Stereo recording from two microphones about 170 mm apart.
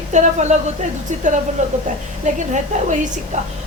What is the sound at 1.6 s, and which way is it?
A woman's voice, 45° right (ahead or behind).